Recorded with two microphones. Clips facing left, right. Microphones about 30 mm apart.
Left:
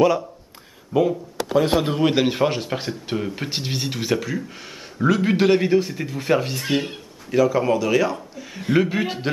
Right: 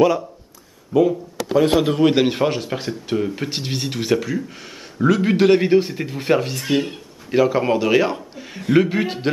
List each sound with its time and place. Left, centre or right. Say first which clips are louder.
0.9 s a man's voice: right 3 dB; centre
5.6 s speech: right 3 dB; centre
6.4 s a man's voice: right 2 dB; centre
7.3 s a man's voice: right 1 dB; right
8.5 s speech: right 3 dB; centre